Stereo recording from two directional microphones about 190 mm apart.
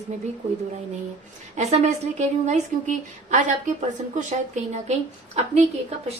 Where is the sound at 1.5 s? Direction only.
35° right (ahead or behind).